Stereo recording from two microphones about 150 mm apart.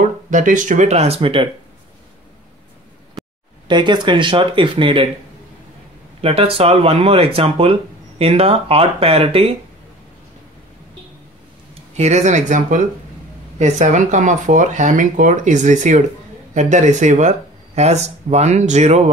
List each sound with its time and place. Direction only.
0.3 s speech: 60° right (ahead or behind); by 1.5 s 35° right (ahead or behind)
3.6 s speech: 30° right (ahead or behind)
6.2 s speech: 40° right (ahead or behind)
11.7 s speech: 50° right (ahead or behind)